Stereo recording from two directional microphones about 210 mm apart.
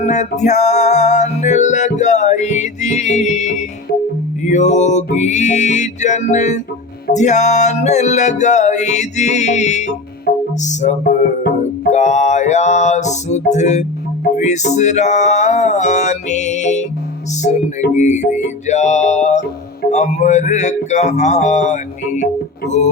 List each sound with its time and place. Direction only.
0.0 s music: 35° left (ahead or behind)